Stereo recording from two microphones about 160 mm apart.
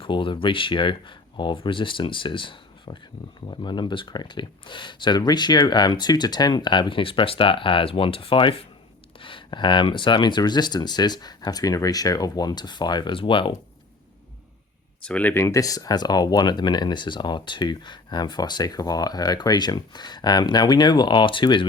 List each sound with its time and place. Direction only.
0.0 s speech: 30° left (ahead or behind)
15.0 s speech: 10° left (ahead or behind); by 21.7 s 30° left (ahead or behind)